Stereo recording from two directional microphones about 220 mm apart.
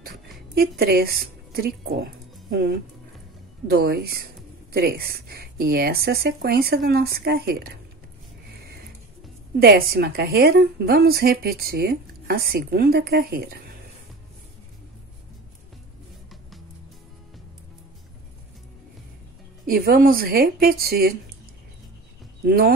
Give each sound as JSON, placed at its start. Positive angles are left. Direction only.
{"t": 0.6, "sound": "a woman's voice", "side_deg": -45}
{"t": 9.6, "sound": "a woman's voice", "side_deg": -45}
{"t": 19.6, "sound": "a woman's voice", "side_deg": -40}
{"t": 22.4, "sound": "speech", "side_deg": -45}